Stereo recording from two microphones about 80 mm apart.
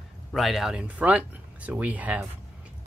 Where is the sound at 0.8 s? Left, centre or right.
Centre.